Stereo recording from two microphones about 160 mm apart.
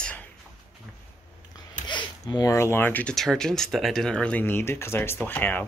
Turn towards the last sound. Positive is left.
turn(degrees=10)  # may be behind; listen again after turning